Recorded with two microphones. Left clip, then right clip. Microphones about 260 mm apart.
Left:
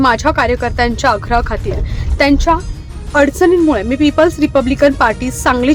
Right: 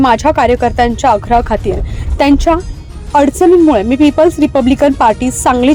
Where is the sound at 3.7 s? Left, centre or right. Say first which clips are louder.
Right 4 dB; centre.